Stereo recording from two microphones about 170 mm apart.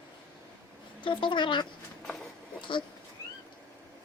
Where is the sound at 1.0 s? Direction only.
30° left (ahead or behind).